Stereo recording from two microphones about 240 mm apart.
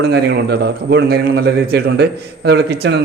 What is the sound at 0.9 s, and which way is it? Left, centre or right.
Speech, right.